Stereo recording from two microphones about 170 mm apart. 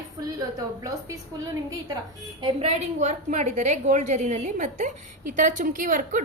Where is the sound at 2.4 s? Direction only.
35° right (ahead or behind).